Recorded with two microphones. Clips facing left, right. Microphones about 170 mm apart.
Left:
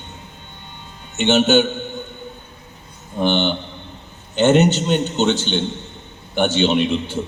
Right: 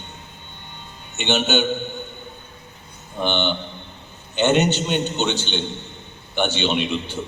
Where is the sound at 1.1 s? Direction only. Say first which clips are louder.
Left 6 dB; 45° left (ahead or behind).